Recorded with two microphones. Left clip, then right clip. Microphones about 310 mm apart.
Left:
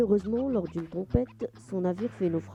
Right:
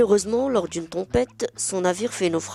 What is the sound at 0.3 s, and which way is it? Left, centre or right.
Speech, right.